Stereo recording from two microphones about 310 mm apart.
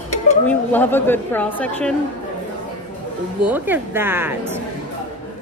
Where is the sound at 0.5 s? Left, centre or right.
Centre.